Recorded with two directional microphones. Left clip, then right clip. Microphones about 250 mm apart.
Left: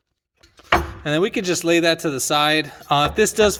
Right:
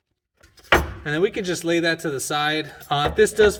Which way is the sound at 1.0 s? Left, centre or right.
Left.